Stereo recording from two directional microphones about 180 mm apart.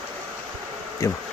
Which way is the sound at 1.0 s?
15° left (ahead or behind).